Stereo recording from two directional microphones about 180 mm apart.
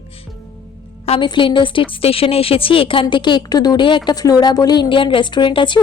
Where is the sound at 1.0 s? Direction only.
30° left (ahead or behind).